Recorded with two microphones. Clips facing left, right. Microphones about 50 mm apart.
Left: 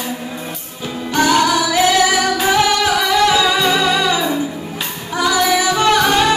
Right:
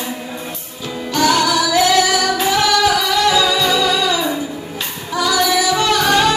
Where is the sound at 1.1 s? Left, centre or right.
Left.